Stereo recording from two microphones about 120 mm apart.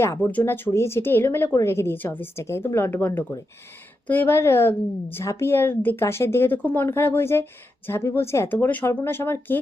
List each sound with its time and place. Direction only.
0.0 s a woman's voice: 20° left (ahead or behind)